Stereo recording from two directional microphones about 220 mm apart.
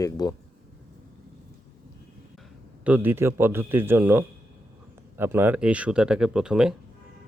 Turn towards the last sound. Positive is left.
turn(degrees=-5)  # may be behind; listen again after turning